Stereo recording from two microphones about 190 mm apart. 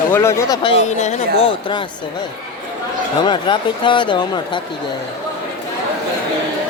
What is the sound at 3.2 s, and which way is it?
Speech, 25° left (ahead or behind).